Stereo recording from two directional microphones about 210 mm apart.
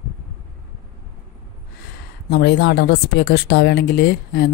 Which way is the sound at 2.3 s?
50° left (ahead or behind).